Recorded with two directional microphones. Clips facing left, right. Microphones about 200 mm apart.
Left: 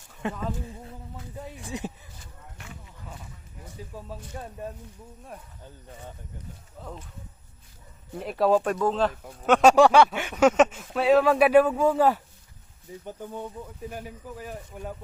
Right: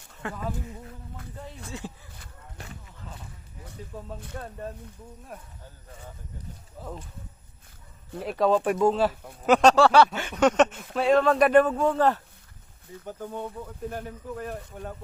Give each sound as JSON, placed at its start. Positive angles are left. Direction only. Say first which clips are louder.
{"t": 0.2, "sound": "speech", "louder": "left 2 dB", "side_deg": 20}
{"t": 2.6, "sound": "a sound", "louder": "right 2 dB", "side_deg": -35}
{"t": 6.7, "sound": "speech", "louder": "right 2 dB", "side_deg": -5}
{"t": 8.2, "sound": "speech", "louder": "left 1 dB", "side_deg": 0}
{"t": 8.6, "sound": "speech", "louder": "right 2 dB", "side_deg": -10}
{"t": 9.6, "sound": "speech", "louder": "left 2 dB", "side_deg": 10}
{"t": 13.9, "sound": "speech", "louder": "right 3 dB", "side_deg": 5}